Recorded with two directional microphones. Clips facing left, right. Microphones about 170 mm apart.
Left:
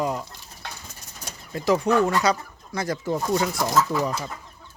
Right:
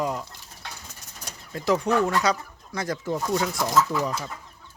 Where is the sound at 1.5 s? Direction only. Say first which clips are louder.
Left 2 dB; 5° left (ahead or behind).